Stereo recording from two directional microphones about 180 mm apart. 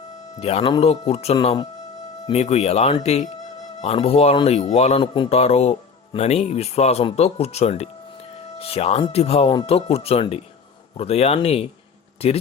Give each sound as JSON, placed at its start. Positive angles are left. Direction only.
{"t": 0.3, "sound": "a man's voice", "side_deg": 35}